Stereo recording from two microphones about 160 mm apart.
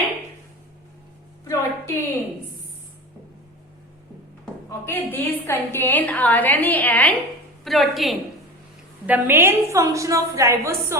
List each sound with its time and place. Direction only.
1.5 s a sound: 15° left (ahead or behind)
4.9 s a woman's voice: 15° left (ahead or behind)
9.0 s a woman's voice: 10° right (ahead or behind)